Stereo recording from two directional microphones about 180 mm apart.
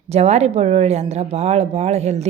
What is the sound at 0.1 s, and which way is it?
Speech, 35° right (ahead or behind).